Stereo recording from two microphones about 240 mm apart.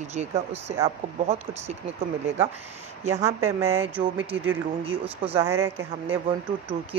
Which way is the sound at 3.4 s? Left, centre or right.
Right.